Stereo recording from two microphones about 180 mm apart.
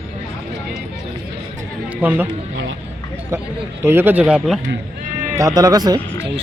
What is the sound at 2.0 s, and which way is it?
Speech, 10° right (ahead or behind).